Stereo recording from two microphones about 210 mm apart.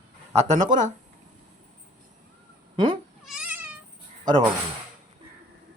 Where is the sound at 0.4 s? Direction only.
35° right (ahead or behind).